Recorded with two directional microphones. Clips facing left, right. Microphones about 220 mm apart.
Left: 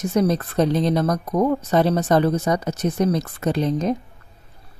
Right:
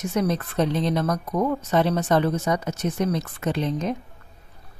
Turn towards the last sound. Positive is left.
turn(degrees=40)  # may be behind; listen again after turning